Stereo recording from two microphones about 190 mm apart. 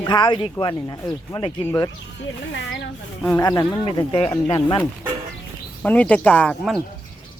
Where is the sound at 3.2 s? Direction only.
15° left (ahead or behind).